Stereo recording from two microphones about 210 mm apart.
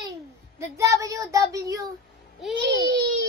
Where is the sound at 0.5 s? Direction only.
15° right (ahead or behind).